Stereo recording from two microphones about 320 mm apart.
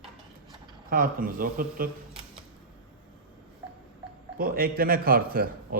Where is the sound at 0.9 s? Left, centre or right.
Right.